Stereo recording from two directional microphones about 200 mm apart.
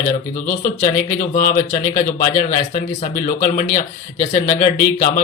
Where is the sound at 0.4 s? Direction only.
40° left (ahead or behind).